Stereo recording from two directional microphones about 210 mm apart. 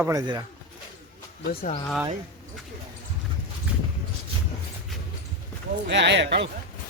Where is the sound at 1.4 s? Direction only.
35° left (ahead or behind).